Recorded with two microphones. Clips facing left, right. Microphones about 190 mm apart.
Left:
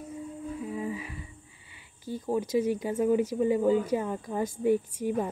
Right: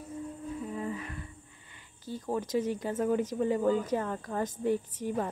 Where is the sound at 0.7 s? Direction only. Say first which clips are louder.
Left 2 dB; 10° left (ahead or behind).